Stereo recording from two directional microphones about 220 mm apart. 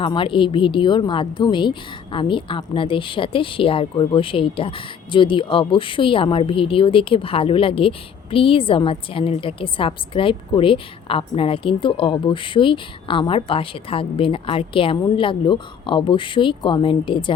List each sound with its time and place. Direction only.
0.0 s speech: 20° left (ahead or behind)